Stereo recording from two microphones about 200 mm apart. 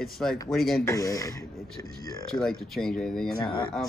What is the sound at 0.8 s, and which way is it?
Speech, 15° left (ahead or behind).